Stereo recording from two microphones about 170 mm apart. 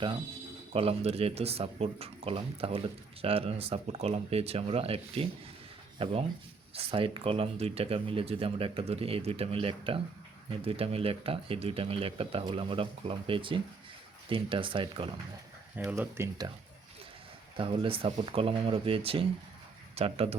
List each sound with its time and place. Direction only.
0.7 s speech: 35° right (ahead or behind)
15.7 s speech: 10° right (ahead or behind)
17.6 s speech: 35° right (ahead or behind)